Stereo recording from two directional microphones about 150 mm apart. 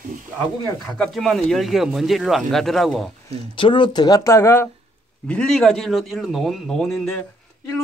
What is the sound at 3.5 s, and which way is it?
Speech, 35° left (ahead or behind).